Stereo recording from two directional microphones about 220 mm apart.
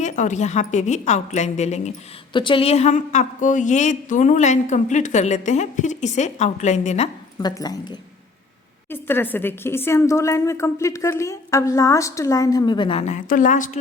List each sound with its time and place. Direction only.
0.0 s a woman's voice: 35° left (ahead or behind)
7.3 s a woman's voice: 15° left (ahead or behind); by 13.7 s 35° left (ahead or behind)